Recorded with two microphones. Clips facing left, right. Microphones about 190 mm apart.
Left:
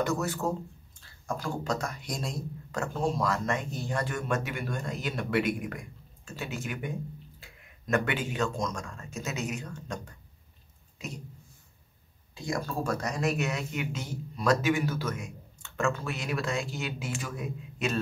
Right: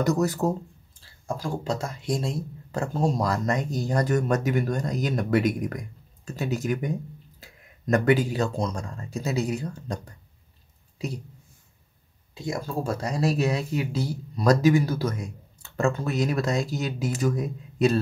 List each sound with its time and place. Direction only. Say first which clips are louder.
0.0 s speech: right 6 dB; 40° right (ahead or behind)
12.4 s speech: right 3 dB; 25° right (ahead or behind)